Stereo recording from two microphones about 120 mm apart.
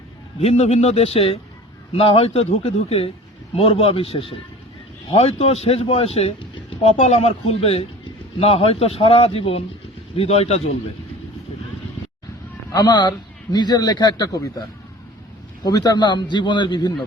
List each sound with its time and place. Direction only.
0.3 s a man's voice: 60° left (ahead or behind)
7.0 s a man's voice: 60° left (ahead or behind)
12.7 s a man's voice: 35° left (ahead or behind)
15.6 s a man's voice: 35° left (ahead or behind)